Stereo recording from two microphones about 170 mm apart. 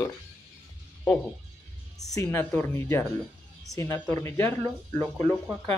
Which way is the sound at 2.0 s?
20° left (ahead or behind).